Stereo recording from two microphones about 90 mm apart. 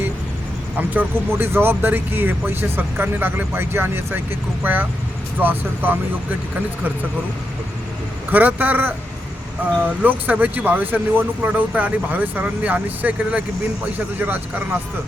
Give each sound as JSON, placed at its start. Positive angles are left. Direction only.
{"t": 0.8, "sound": "speech", "side_deg": -25}
{"t": 8.3, "sound": "speech", "side_deg": -20}